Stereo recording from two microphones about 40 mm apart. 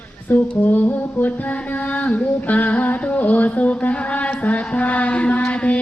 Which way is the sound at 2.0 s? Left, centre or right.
Left.